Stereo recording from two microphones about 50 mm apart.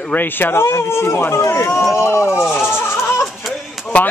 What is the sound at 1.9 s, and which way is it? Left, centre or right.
Speech, left.